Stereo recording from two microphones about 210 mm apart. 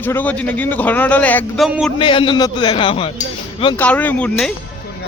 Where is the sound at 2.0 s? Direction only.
25° left (ahead or behind).